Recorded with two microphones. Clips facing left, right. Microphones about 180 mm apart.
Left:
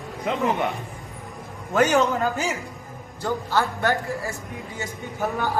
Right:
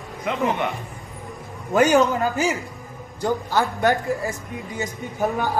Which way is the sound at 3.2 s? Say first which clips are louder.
Right 2 dB; 15° right (ahead or behind).